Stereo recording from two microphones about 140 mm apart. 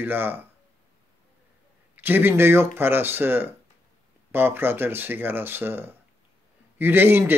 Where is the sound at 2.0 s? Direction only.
15° right (ahead or behind).